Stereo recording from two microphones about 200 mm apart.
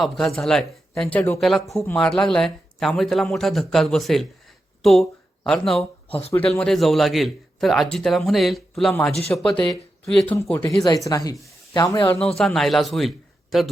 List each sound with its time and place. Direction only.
0.0 s speech: centre (ahead or behind)
10.8 s speech: 20° left (ahead or behind)
12.2 s a man's voice: 5° left (ahead or behind)